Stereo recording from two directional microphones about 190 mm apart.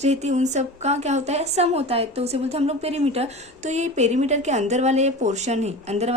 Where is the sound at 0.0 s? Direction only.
35° right (ahead or behind).